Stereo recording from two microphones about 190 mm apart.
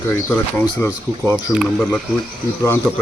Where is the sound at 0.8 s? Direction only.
15° left (ahead or behind).